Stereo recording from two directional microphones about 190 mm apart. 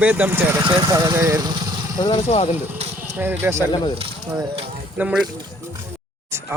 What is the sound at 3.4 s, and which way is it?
Speech, 10° right (ahead or behind).